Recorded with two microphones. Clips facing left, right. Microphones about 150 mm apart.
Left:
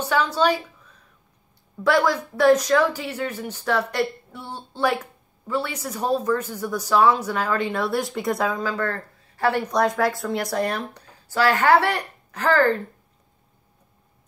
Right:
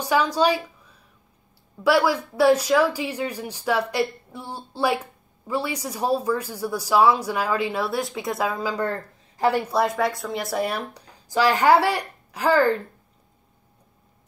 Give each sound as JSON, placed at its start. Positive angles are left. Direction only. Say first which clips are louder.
{"t": 0.0, "sound": "a woman's voice", "louder": "right 1 dB", "side_deg": -10}